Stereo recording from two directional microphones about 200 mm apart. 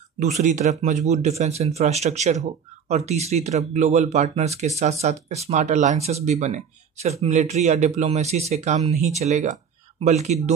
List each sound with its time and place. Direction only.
0.2 s speech: 35° right (ahead or behind)